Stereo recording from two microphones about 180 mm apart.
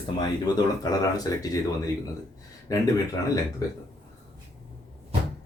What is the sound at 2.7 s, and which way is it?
Speech, 20° left (ahead or behind).